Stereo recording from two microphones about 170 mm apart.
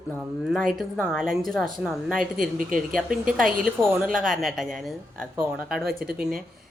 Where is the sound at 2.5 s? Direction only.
55° right (ahead or behind).